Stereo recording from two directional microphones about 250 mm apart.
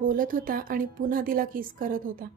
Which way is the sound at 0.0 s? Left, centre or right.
Right.